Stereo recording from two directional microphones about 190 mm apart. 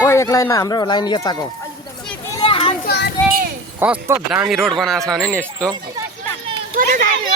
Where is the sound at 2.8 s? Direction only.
60° left (ahead or behind).